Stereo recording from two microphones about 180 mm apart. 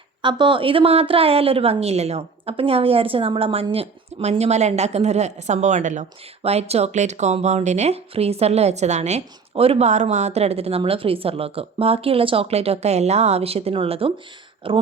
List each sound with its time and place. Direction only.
0.2 s a woman's voice: 25° right (ahead or behind)